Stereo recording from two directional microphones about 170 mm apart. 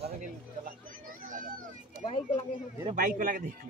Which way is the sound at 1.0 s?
50° right (ahead or behind).